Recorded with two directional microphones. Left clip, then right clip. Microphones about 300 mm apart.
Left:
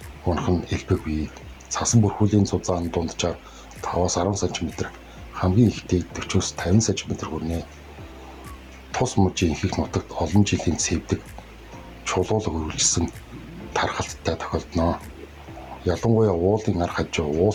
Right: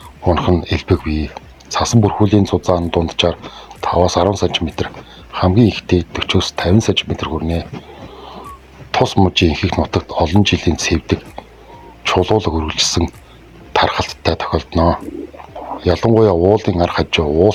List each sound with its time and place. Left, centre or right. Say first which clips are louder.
0.3 s speech: right 10 dB; right
8.9 s speech: right 9 dB; right
15.8 s speech: right 9 dB; right